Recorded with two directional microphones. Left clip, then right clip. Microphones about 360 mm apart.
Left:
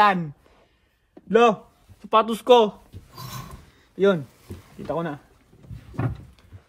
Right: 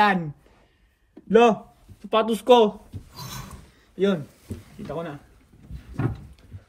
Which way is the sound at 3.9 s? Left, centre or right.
Centre.